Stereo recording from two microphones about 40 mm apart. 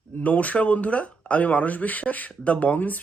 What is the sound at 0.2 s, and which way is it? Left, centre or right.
Speech, left.